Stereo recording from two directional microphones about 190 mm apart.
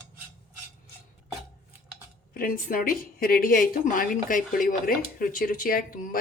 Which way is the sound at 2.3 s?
50° left (ahead or behind).